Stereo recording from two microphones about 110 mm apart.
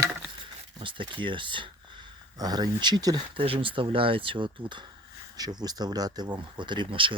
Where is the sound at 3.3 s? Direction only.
55° right (ahead or behind).